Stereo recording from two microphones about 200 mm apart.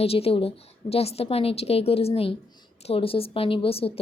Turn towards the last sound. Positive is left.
turn(degrees=30)  # may be behind; listen again after turning